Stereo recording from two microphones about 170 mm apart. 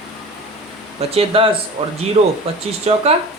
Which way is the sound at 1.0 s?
35° right (ahead or behind).